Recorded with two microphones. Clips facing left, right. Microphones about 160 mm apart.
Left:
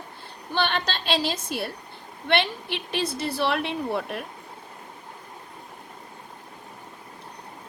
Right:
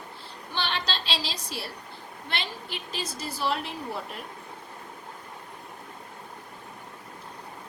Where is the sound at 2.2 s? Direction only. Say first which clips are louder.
Left 11 dB; 65° left (ahead or behind).